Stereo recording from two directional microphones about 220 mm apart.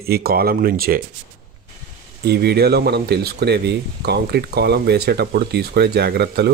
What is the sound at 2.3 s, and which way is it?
Speech, 45° right (ahead or behind).